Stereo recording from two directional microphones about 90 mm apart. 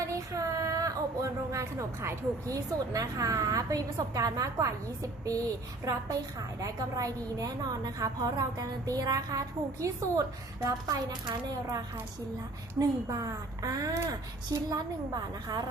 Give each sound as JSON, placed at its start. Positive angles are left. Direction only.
{"t": 0.1, "sound": "speech", "side_deg": -35}
{"t": 5.8, "sound": "speech", "side_deg": -40}
{"t": 12.8, "sound": "speech", "side_deg": -40}